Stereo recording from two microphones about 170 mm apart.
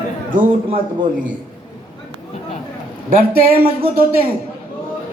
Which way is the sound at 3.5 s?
35° right (ahead or behind).